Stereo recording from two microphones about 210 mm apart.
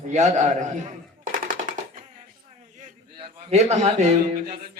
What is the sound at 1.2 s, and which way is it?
Machine gun, 40° right (ahead or behind).